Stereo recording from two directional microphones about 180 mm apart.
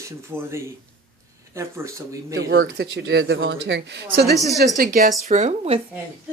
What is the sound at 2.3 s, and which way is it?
Speech, 65° right (ahead or behind).